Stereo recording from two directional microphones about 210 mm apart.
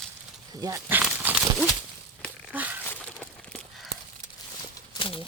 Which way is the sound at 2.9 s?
5° left (ahead or behind).